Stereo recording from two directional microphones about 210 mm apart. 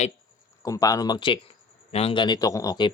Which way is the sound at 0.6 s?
15° left (ahead or behind).